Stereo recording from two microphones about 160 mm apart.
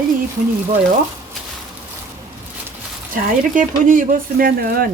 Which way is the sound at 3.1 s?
55° right (ahead or behind).